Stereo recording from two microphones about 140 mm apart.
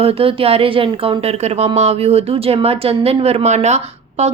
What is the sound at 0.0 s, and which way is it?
A woman's voice, 40° right (ahead or behind).